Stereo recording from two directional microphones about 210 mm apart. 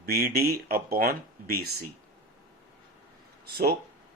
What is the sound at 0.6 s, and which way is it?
Speech, 45° right (ahead or behind).